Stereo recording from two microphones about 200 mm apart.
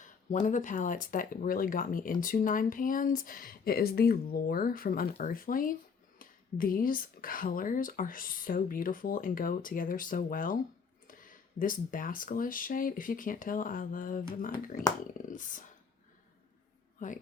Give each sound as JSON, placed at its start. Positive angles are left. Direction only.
{"t": 0.0, "sound": "speech", "side_deg": 40}
{"t": 17.0, "sound": "speech", "side_deg": 40}